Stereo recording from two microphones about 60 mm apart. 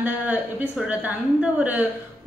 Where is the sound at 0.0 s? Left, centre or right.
Right.